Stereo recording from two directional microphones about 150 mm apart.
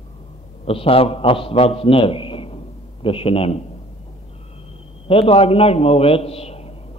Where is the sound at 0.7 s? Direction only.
40° left (ahead or behind).